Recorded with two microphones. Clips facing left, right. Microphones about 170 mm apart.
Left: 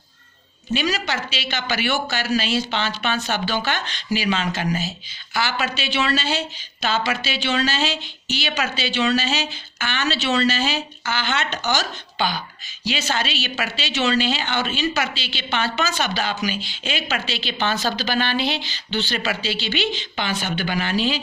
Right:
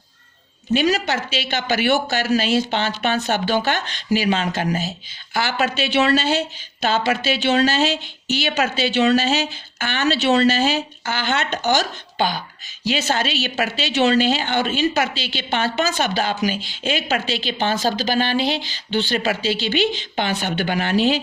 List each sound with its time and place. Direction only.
0.7 s a woman's voice: 50° right (ahead or behind)